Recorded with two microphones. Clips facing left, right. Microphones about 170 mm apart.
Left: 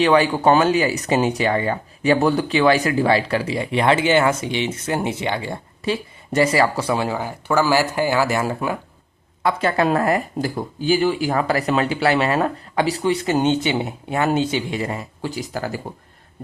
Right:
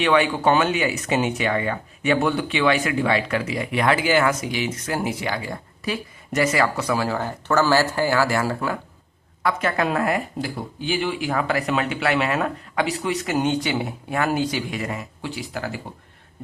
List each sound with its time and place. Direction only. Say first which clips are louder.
0.0 s speech: left 3 dB; 35° left (ahead or behind)
7.2 s speech: left 1 dB; 10° left (ahead or behind)
9.4 s speech: left 3 dB; 30° left (ahead or behind)